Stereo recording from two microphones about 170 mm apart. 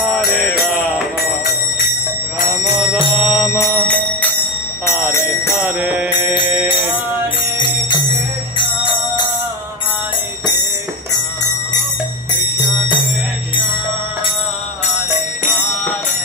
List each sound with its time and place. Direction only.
0.1 s music: centre (ahead or behind)
3.2 s music: 5° right (ahead or behind)
3.8 s clock: 10° left (ahead or behind)
5.6 s music: 5° right (ahead or behind)
7.5 s music: 25° left (ahead or behind)